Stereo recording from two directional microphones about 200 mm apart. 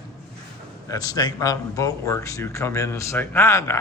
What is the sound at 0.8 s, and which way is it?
Speech, 20° left (ahead or behind).